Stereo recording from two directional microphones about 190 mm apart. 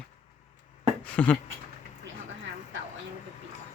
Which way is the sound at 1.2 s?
5° left (ahead or behind).